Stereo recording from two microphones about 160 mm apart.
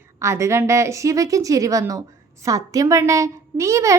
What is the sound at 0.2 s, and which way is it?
A woman's voice, 15° right (ahead or behind).